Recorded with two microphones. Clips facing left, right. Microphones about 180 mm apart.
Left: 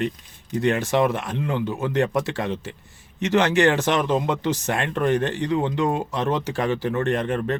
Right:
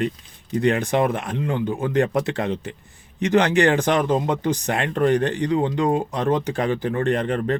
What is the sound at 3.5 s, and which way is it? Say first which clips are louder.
A man's voice: right 1 dB; 55° right (ahead or behind).